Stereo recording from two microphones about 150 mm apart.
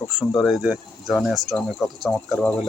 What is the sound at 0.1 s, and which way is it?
Speech, centre (ahead or behind).